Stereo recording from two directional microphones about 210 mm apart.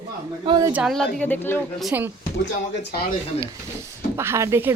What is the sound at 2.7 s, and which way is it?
Speech, 55° left (ahead or behind).